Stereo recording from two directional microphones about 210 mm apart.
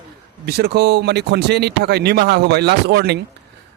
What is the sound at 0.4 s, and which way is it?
A man's voice, 50° right (ahead or behind).